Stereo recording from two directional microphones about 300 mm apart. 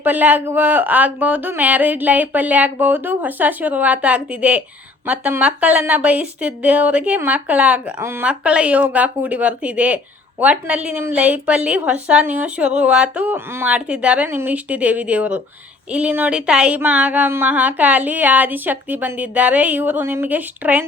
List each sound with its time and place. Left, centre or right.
0.0 s speech: centre